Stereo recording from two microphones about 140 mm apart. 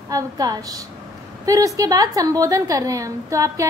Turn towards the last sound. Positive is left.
turn(degrees=-25)  # may be behind; listen again after turning